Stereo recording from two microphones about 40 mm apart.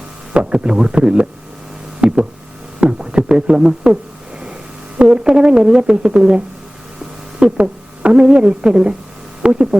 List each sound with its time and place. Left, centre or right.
0.3 s speech: right
2.0 s a sound: right
2.8 s speech: right
4.9 s speech: right